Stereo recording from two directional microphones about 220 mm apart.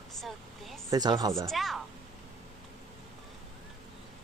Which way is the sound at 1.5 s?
Centre (ahead or behind).